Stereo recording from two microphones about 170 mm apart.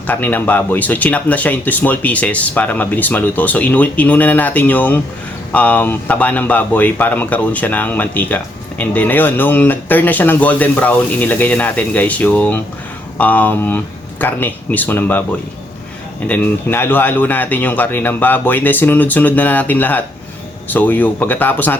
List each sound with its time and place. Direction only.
0.1 s speech: 10° left (ahead or behind)